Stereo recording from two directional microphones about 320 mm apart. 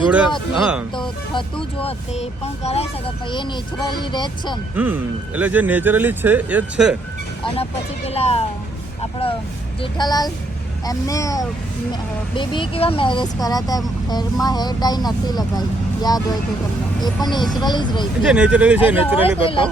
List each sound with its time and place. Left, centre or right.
0.6 s speech: centre
0.9 s speech: centre
4.7 s speech: centre
7.5 s speech: centre
9.8 s speech: centre
18.2 s speech: centre
18.9 s speech: centre